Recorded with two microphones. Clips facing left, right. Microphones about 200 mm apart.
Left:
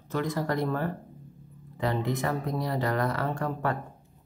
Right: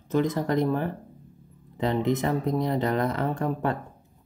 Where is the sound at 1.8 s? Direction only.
20° right (ahead or behind).